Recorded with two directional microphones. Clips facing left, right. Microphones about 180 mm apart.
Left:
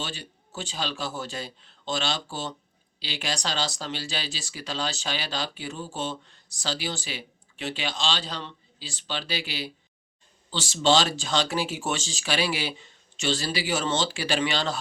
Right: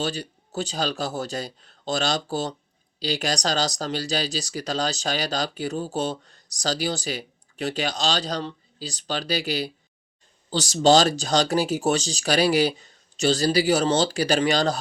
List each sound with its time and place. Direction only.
0.0 s speech: 40° right (ahead or behind)